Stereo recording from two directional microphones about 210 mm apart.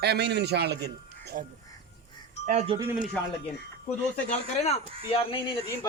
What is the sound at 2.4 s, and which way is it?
Speech, 30° right (ahead or behind).